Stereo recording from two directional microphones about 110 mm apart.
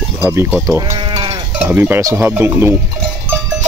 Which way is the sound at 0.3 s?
20° right (ahead or behind).